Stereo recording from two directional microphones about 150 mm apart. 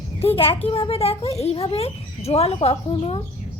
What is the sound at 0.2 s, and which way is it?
Speech, 40° left (ahead or behind).